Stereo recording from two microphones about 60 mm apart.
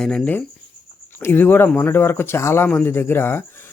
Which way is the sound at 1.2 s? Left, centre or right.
Left.